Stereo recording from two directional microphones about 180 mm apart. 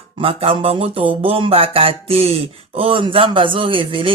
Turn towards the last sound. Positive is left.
turn(degrees=-30)  # may be behind; listen again after turning